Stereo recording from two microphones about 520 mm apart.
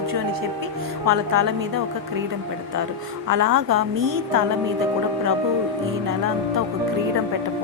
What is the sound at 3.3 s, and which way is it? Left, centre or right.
A woman's voice, right.